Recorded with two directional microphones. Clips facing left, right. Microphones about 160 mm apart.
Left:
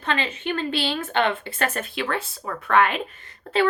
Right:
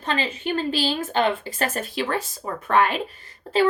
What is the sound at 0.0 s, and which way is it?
A woman's voice, 35° right (ahead or behind).